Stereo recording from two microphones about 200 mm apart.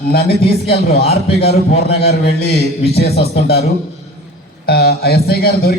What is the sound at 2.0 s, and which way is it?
A man's voice, 50° left (ahead or behind).